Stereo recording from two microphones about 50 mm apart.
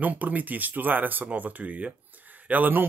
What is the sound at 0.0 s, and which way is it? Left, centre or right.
Speech, right.